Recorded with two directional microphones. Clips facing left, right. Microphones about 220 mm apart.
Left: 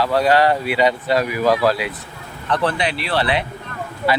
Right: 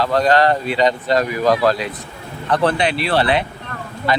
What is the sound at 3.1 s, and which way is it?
Speech, 50° right (ahead or behind).